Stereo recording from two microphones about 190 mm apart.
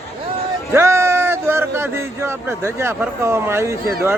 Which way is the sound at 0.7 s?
15° right (ahead or behind).